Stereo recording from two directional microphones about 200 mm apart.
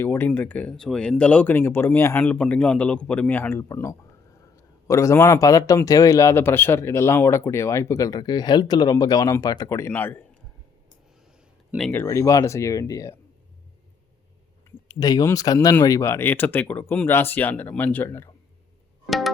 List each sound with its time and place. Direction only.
0.0 s a man's voice: 10° left (ahead or behind)
11.9 s a man's voice: 15° left (ahead or behind)
14.8 s a man's voice: 20° left (ahead or behind)
19.0 s music: centre (ahead or behind)